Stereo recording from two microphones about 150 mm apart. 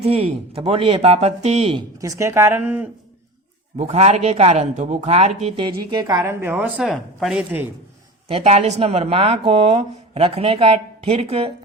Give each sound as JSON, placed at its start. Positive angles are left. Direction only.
{"t": 0.0, "sound": "speech", "side_deg": -40}
{"t": 2.0, "sound": "speech", "side_deg": -20}
{"t": 3.8, "sound": "speech", "side_deg": -45}
{"t": 8.3, "sound": "speech", "side_deg": -45}